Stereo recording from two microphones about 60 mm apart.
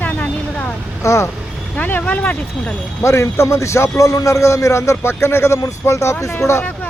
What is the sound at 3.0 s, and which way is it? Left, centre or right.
A man's voice, left.